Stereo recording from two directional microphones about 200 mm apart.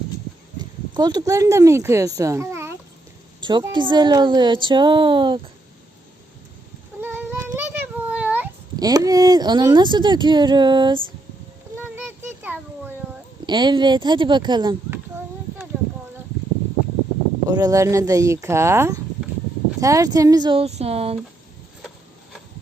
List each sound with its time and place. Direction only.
0.9 s a child's voice: 20° right (ahead or behind)
7.0 s child singing: 10° right (ahead or behind)
8.7 s speech: 20° right (ahead or behind)
12.4 s a sound: 10° right (ahead or behind)
13.4 s speech: 20° right (ahead or behind)
17.5 s a child's voice: 15° right (ahead or behind)